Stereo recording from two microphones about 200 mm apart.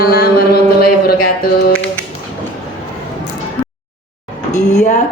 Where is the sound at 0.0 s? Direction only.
50° left (ahead or behind).